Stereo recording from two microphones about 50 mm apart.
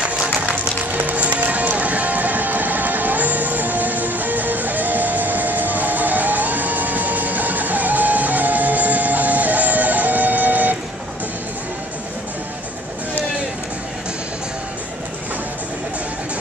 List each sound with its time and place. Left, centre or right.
1.0 s music: right